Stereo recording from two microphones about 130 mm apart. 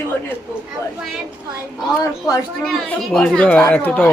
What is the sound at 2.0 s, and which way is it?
Speech, 25° left (ahead or behind).